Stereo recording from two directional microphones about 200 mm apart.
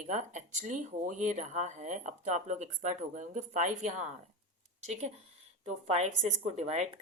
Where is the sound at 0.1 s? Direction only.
35° right (ahead or behind).